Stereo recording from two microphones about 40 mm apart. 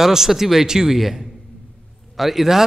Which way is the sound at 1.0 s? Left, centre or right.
Centre.